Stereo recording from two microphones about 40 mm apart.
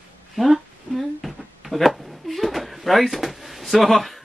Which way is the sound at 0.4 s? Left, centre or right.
Centre.